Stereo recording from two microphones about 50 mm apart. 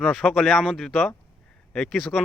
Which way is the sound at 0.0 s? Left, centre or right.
Centre.